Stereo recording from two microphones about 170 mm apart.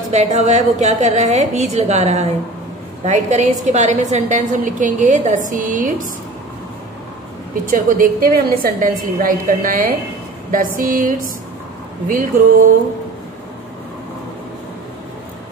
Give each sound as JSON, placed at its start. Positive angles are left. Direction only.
{"t": 0.1, "sound": "a woman's voice", "side_deg": -40}
{"t": 7.6, "sound": "a woman's voice", "side_deg": -55}